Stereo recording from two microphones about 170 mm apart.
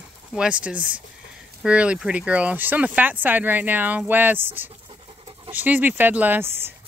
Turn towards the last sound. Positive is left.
turn(degrees=-10)  # may be behind; listen again after turning